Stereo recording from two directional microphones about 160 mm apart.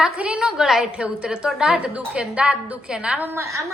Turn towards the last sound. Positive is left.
turn(degrees=-20)  # may be behind; listen again after turning